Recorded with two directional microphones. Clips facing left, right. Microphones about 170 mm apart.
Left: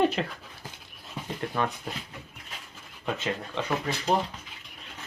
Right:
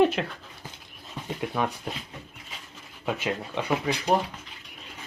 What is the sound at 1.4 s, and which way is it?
Speech, 10° right (ahead or behind).